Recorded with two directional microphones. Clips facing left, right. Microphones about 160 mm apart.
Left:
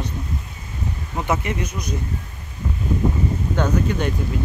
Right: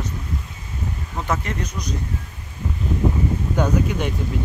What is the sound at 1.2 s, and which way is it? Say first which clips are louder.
Speech: left 2 dB; 10° left (ahead or behind).